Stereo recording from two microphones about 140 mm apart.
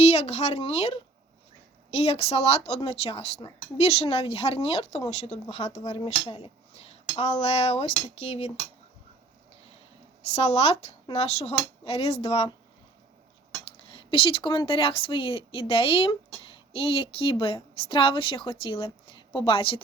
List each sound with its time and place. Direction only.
0.0 s speech: 55° left (ahead or behind)
6.0 s speech: 40° left (ahead or behind)
10.3 s speech: 50° left (ahead or behind)
13.8 s a woman's voice: 40° left (ahead or behind)